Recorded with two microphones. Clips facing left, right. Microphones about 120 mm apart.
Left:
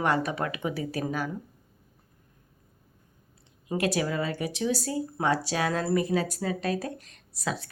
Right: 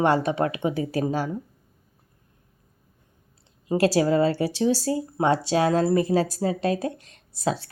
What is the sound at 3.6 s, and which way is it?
Speech, 30° right (ahead or behind).